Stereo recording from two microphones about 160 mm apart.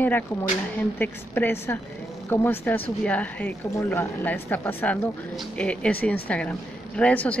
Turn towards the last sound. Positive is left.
turn(degrees=10)  # may be behind; listen again after turning